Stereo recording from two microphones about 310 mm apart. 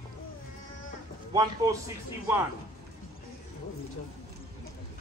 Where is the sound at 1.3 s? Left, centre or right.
Centre.